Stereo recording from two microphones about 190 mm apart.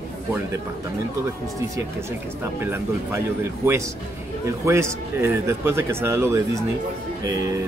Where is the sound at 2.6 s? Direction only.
10° right (ahead or behind).